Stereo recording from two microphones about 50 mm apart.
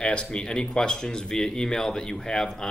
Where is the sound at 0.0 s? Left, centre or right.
Left.